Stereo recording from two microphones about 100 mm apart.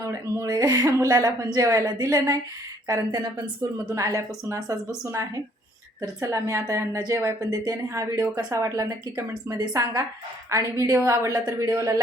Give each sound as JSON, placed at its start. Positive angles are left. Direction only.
{"t": 0.0, "sound": "speech", "side_deg": -30}
{"t": 3.1, "sound": "speech", "side_deg": -45}
{"t": 3.8, "sound": "speech", "side_deg": -30}
{"t": 6.0, "sound": "a woman's voice", "side_deg": -30}